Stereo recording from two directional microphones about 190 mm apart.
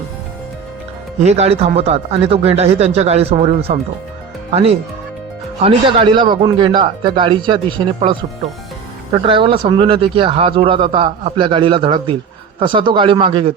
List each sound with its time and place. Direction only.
1.2 s speech: 35° right (ahead or behind)
9.1 s speech: 25° right (ahead or behind)